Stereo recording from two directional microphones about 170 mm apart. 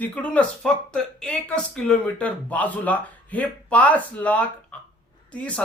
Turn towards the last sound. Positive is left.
turn(degrees=5)  # may be behind; listen again after turning